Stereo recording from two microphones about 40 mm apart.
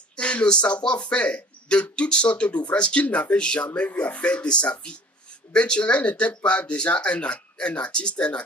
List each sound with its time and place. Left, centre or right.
0.1 s speech: left